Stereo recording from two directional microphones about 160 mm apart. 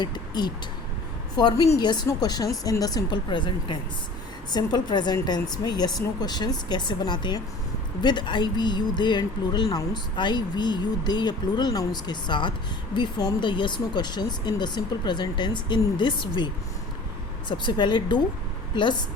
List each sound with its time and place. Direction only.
0.0 s speech: 25° left (ahead or behind)
17.5 s speech: 30° left (ahead or behind)